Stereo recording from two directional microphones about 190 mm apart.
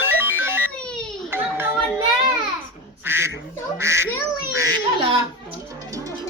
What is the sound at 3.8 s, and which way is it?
Quack, 15° right (ahead or behind).